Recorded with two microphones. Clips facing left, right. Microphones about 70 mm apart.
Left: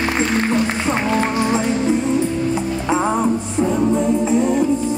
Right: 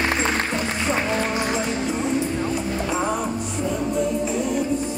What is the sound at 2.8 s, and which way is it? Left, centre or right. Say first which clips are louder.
Music: left 8 dB; left.